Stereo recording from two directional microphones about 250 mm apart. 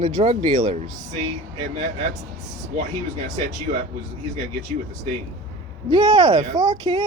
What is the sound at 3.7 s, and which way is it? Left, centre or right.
Speech, right.